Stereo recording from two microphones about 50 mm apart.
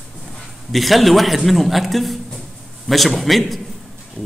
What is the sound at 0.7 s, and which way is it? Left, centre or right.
A man's voice, centre.